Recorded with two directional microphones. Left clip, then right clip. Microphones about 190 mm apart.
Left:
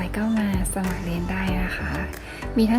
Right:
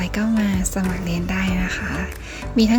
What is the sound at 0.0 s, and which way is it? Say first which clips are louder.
A woman's voice: right 3 dB; 40° right (ahead or behind).